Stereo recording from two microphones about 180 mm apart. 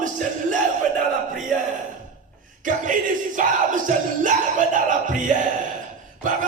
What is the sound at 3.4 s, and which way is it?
Speech, 45° right (ahead or behind).